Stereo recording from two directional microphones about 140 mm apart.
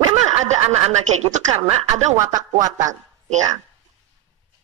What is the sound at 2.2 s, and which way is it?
Speech, 25° right (ahead or behind).